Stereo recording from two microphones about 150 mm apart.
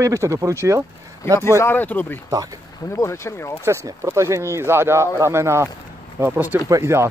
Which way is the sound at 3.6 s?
20° right (ahead or behind).